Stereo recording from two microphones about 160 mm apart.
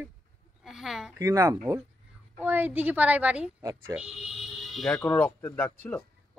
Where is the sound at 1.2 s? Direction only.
15° right (ahead or behind); by 6.4 s 10° left (ahead or behind).